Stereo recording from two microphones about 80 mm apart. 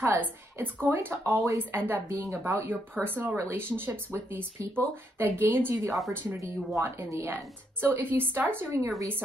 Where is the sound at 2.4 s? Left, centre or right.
Right.